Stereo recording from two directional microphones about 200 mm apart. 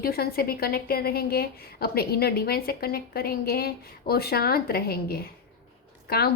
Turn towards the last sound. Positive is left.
turn(degrees=50)  # may be behind; listen again after turning